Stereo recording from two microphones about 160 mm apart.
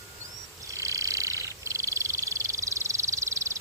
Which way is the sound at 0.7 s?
20° right (ahead or behind).